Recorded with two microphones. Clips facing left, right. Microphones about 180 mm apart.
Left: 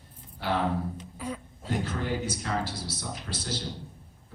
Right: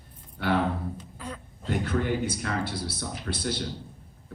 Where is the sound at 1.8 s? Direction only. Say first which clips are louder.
Right 6 dB; 60° right (ahead or behind).